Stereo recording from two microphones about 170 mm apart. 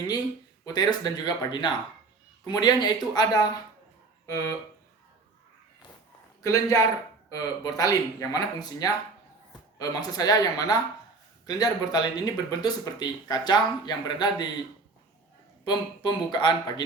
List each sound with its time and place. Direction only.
0.6 s speech: 25° left (ahead or behind)
6.4 s speech: 20° left (ahead or behind)
15.6 s speech: 25° left (ahead or behind)